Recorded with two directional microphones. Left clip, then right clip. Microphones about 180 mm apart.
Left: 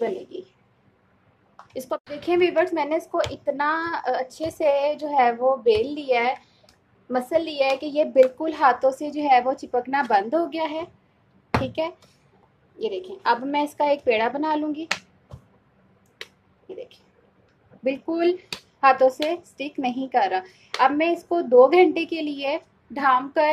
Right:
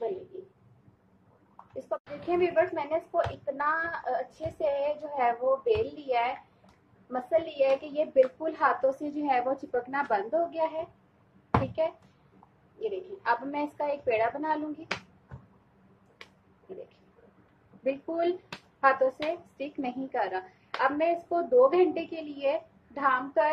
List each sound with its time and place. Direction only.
1.9 s speech: 50° left (ahead or behind); by 9.5 s 35° left (ahead or behind)
9.7 s speech: 50° left (ahead or behind)
13.2 s speech: 40° left (ahead or behind)
17.8 s speech: 45° left (ahead or behind)